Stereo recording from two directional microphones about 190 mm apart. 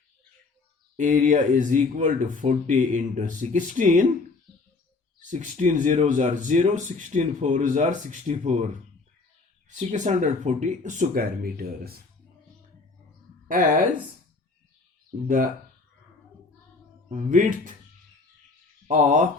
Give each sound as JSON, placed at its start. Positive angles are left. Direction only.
{"t": 0.9, "sound": "speech", "side_deg": -45}
{"t": 5.3, "sound": "speech", "side_deg": -40}
{"t": 13.5, "sound": "speech", "side_deg": -45}
{"t": 17.1, "sound": "speech", "side_deg": -40}
{"t": 18.9, "sound": "speech", "side_deg": -40}